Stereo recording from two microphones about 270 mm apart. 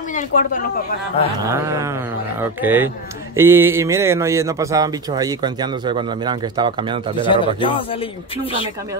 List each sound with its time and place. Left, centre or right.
0.1 s speech: left
1.5 s speech: centre
7.2 s speech: centre